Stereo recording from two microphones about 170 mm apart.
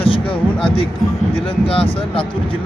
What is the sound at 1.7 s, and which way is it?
Speech, 35° left (ahead or behind).